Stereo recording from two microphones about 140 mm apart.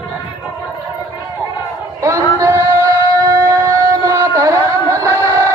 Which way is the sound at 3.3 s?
20° right (ahead or behind).